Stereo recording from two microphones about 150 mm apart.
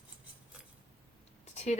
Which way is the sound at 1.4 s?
45° left (ahead or behind).